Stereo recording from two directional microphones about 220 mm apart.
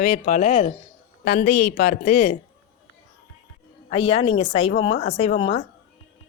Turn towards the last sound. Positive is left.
turn(degrees=25)  # may be behind; listen again after turning